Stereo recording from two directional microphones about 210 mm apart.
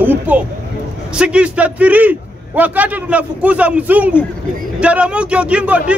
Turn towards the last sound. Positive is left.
turn(degrees=-5)  # may be behind; listen again after turning